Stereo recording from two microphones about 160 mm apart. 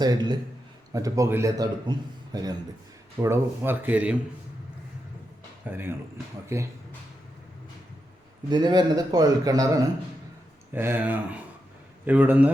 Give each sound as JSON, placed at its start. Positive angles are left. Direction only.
{"t": 0.0, "sound": "a man's voice", "side_deg": -25}
{"t": 5.6, "sound": "speech", "side_deg": -15}
{"t": 8.4, "sound": "a man's voice", "side_deg": -25}